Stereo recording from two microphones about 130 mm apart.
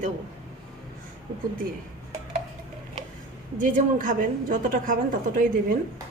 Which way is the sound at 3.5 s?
80° right.